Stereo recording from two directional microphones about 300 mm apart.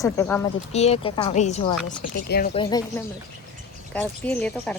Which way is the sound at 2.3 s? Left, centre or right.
Left.